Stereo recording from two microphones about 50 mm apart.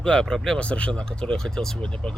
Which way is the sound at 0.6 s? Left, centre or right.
Left.